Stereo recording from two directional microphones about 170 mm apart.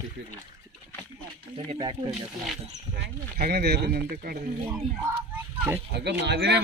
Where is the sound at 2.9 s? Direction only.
70° right (ahead or behind).